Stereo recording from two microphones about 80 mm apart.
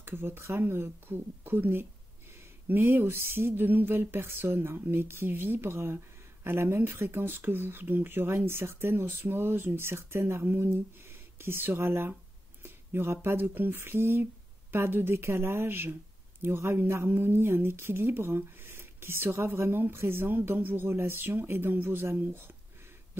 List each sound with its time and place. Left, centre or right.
0.0 s speech: right